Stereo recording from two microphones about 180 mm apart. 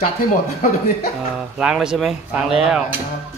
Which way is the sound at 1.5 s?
5° right (ahead or behind).